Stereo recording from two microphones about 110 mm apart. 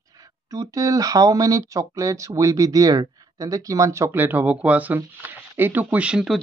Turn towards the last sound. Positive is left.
turn(degrees=-5)  # may be behind; listen again after turning